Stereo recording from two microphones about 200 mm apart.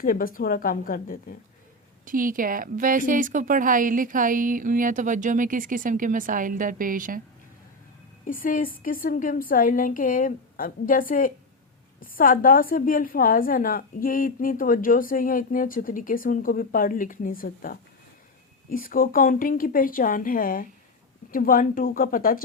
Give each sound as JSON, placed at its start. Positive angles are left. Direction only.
{"t": 0.0, "sound": "a woman's voice", "side_deg": 45}
{"t": 2.0, "sound": "a woman's voice", "side_deg": -45}
{"t": 8.3, "sound": "a woman's voice", "side_deg": 45}